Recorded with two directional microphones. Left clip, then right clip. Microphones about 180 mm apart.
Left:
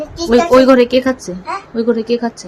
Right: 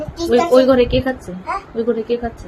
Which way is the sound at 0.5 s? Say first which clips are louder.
Left 4 dB; 30° left (ahead or behind).